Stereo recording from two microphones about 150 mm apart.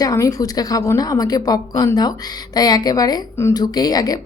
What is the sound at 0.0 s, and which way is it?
A woman's voice, 25° left (ahead or behind).